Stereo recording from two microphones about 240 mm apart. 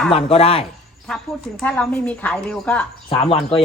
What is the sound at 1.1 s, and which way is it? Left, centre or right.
Speech, centre.